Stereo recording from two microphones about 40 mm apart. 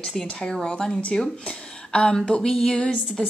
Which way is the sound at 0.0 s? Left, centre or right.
Centre.